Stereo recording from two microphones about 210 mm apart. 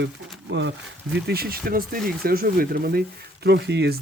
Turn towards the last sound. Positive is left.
turn(degrees=-50)  # may be behind; listen again after turning